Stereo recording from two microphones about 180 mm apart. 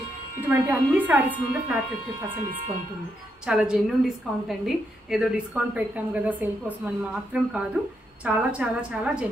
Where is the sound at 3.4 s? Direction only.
5° right (ahead or behind).